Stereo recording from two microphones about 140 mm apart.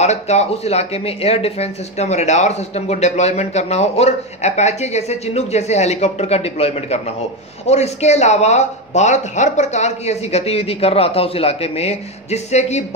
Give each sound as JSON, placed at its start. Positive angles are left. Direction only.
{"t": 0.0, "sound": "speech", "side_deg": 50}